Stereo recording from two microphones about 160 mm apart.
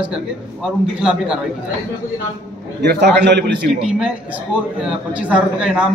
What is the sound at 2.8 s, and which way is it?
Speech, 85° right.